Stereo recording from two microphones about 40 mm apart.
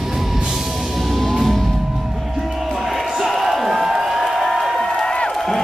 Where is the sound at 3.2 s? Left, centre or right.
Centre.